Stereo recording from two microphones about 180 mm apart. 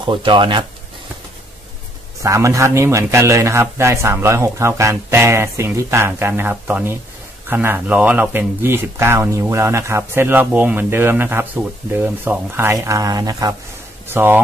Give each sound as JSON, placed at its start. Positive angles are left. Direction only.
{"t": 0.0, "sound": "speech", "side_deg": -25}
{"t": 2.2, "sound": "speech", "side_deg": -15}